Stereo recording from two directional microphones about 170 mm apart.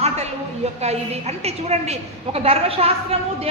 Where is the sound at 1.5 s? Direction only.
40° right (ahead or behind).